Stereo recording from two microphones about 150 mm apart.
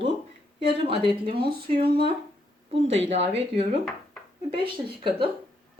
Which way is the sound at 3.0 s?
45° right (ahead or behind).